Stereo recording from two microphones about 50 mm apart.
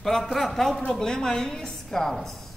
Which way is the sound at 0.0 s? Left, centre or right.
Centre.